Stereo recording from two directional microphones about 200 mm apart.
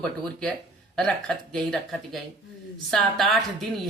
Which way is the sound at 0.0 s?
5° left (ahead or behind).